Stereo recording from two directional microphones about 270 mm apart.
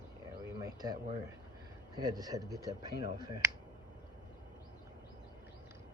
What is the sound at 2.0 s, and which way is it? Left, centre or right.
Speech, centre.